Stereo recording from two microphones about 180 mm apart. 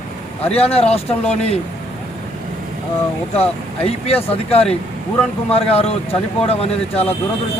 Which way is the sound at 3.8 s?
35° left (ahead or behind).